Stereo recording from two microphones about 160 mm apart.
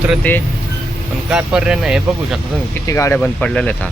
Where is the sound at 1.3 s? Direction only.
5° right (ahead or behind).